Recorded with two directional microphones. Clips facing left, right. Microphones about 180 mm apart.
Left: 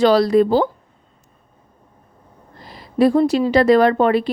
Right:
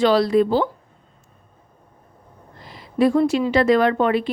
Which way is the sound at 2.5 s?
35° left (ahead or behind).